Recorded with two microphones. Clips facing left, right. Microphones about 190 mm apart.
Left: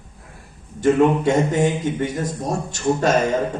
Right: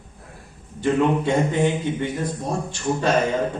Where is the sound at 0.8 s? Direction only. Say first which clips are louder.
Left 4 dB; 45° left (ahead or behind).